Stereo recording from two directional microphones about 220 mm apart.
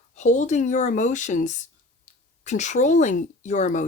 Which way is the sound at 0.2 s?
35° left (ahead or behind).